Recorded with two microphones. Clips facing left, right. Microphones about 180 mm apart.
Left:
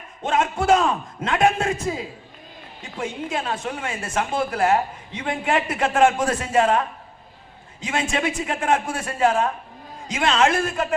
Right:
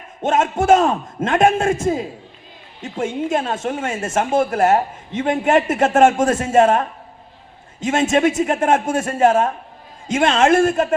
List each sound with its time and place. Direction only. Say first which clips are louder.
0.3 s a woman's voice: right 4 dB; 45° right (ahead or behind)